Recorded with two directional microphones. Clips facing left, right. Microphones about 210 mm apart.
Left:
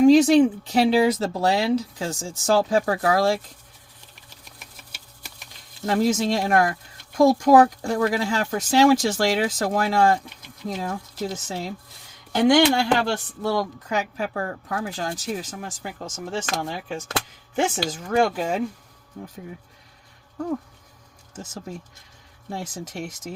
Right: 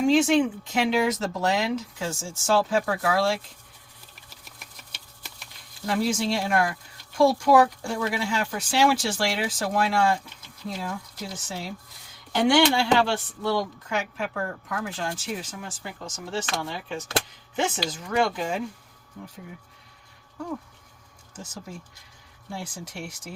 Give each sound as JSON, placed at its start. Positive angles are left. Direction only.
{"t": 0.0, "sound": "speech", "side_deg": 35}
{"t": 5.8, "sound": "speech", "side_deg": 40}
{"t": 8.1, "sound": "speech", "side_deg": 40}
{"t": 12.3, "sound": "speech", "side_deg": 40}
{"t": 22.7, "sound": "speech", "side_deg": 40}